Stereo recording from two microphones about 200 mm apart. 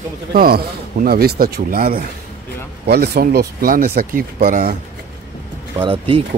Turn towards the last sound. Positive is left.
turn(degrees=-25)  # may be behind; listen again after turning